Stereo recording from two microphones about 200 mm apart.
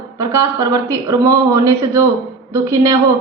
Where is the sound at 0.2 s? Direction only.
15° right (ahead or behind).